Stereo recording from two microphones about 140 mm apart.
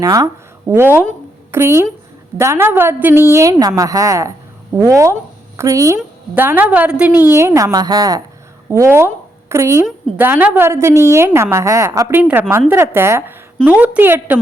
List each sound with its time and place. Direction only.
0.0 s a woman's voice: 25° right (ahead or behind)
0.7 s a woman's voice: 15° right (ahead or behind)